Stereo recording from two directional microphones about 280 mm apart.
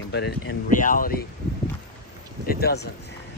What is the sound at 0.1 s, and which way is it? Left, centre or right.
Speech, left.